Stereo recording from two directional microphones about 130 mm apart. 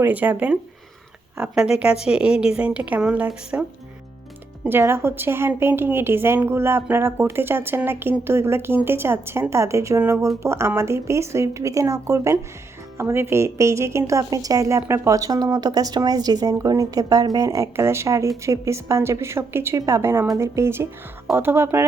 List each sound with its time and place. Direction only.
0.0 s a woman's voice: 10° right (ahead or behind)
4.7 s a woman's voice: 20° right (ahead or behind)